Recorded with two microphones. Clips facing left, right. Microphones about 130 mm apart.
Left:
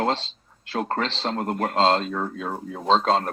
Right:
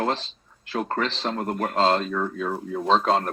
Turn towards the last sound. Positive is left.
turn(degrees=30)  # may be behind; listen again after turning